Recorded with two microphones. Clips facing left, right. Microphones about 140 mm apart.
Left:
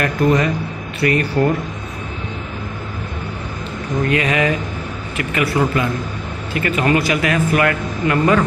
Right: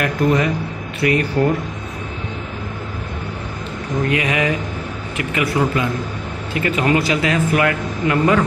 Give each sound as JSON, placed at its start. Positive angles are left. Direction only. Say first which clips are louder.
{"t": 0.0, "sound": "a man's voice", "louder": "left 1 dB", "side_deg": -10}
{"t": 4.1, "sound": "a man's voice", "louder": "left 2 dB", "side_deg": -15}